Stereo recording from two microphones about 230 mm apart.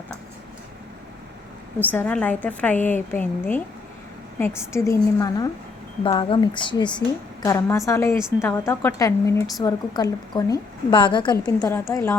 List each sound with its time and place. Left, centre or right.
1.8 s a woman's voice: centre